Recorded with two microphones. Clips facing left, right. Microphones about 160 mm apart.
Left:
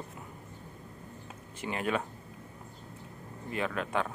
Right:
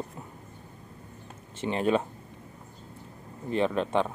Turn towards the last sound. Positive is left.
turn(degrees=-25)  # may be behind; listen again after turning